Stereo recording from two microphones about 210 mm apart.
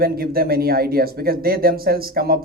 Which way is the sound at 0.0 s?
45° right (ahead or behind).